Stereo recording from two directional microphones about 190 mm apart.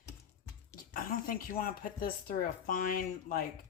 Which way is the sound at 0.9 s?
45° left (ahead or behind).